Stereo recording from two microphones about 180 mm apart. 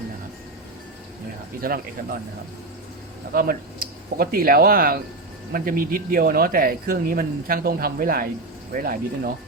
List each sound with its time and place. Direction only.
1.6 s speech: 55° right (ahead or behind)
3.3 s speech: 55° right (ahead or behind)